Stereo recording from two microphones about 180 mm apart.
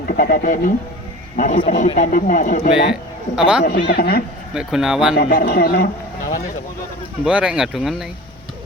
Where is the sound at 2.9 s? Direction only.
5° right (ahead or behind).